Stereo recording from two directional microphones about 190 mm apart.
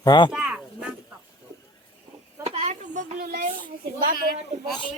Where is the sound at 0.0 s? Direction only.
25° left (ahead or behind).